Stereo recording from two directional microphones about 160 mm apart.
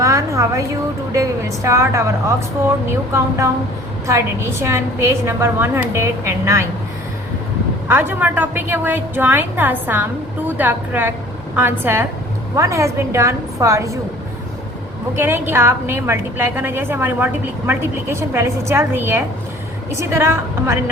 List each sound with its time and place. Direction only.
0.0 s a sound: 20° right (ahead or behind)
1.1 s a woman's voice: 20° right (ahead or behind)
7.9 s a woman's voice: 15° right (ahead or behind)
15.1 s a woman's voice: 15° right (ahead or behind)